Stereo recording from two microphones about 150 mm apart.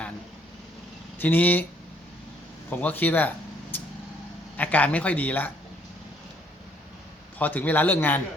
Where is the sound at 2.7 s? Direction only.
10° left (ahead or behind).